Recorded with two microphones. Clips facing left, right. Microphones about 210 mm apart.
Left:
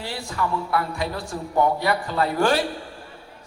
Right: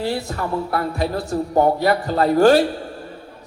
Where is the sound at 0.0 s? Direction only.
40° right (ahead or behind).